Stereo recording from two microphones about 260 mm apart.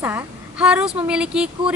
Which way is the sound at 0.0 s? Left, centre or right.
Centre.